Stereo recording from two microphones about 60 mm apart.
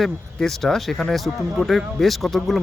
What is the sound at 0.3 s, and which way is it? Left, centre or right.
Speech, centre.